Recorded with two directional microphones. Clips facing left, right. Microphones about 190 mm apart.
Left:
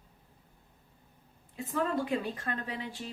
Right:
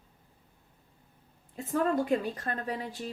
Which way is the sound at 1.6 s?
45° right (ahead or behind).